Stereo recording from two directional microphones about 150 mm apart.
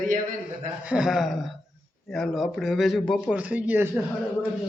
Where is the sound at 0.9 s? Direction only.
5° right (ahead or behind).